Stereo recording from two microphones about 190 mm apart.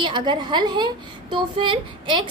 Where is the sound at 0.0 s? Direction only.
25° right (ahead or behind).